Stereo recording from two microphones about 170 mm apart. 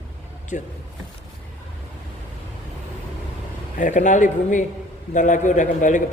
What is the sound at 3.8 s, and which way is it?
A man's voice, 45° left (ahead or behind).